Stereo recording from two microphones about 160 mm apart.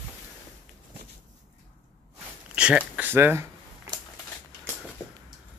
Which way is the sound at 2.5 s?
5° right (ahead or behind).